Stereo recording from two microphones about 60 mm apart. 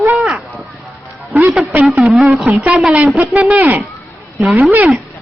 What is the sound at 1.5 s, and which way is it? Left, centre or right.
Speech, centre.